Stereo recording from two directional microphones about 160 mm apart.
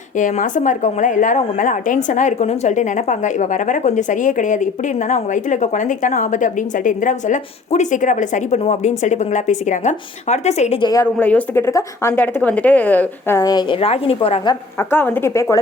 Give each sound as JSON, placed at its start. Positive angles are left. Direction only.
{"t": 0.2, "sound": "a woman's voice", "side_deg": 50}
{"t": 10.8, "sound": "a woman's voice", "side_deg": 25}
{"t": 11.0, "sound": "speech", "side_deg": 10}
{"t": 14.8, "sound": "speech", "side_deg": 15}